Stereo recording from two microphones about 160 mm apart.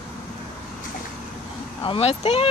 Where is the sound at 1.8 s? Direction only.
40° left (ahead or behind).